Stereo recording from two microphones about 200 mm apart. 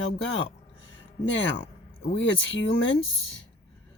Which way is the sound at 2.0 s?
65° left (ahead or behind).